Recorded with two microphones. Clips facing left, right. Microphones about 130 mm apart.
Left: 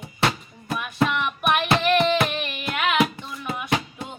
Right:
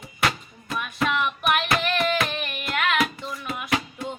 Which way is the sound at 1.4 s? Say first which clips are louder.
Left 5 dB; 25° left (ahead or behind).